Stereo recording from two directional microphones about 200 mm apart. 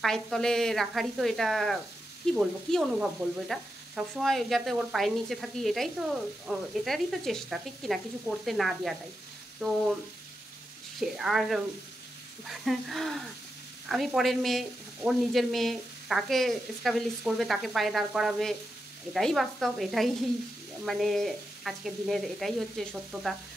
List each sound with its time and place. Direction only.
0.0 s stir: centre (ahead or behind)
11.0 s stir: centre (ahead or behind)